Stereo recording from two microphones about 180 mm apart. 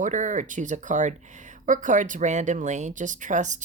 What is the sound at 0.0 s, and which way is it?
Speech, 45° right (ahead or behind).